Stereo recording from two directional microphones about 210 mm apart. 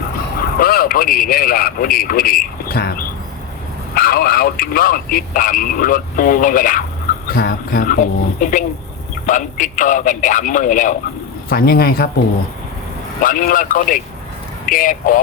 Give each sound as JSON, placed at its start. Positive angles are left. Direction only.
{"t": 0.6, "sound": "a man's voice", "side_deg": 45}
{"t": 13.2, "sound": "speech", "side_deg": 40}